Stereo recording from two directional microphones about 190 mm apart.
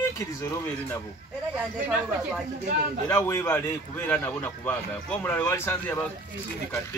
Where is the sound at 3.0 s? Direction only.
15° left (ahead or behind).